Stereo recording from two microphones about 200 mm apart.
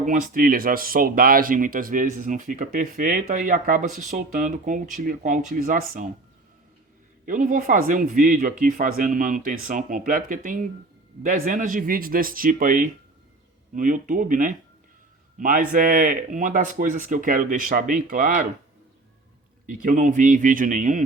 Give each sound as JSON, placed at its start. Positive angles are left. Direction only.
{"t": 0.0, "sound": "speech", "side_deg": -40}
{"t": 7.3, "sound": "speech", "side_deg": -40}
{"t": 19.6, "sound": "speech", "side_deg": -40}